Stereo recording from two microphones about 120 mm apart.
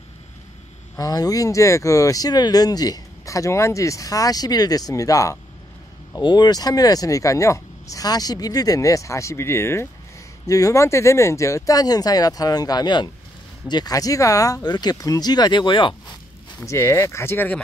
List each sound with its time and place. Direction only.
0.9 s speech: 30° left (ahead or behind)
16.5 s speech: 25° left (ahead or behind)